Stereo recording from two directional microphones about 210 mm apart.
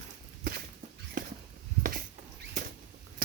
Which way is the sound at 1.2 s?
40° right (ahead or behind).